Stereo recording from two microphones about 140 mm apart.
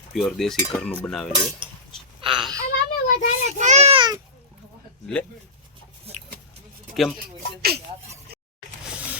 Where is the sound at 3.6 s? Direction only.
55° right (ahead or behind).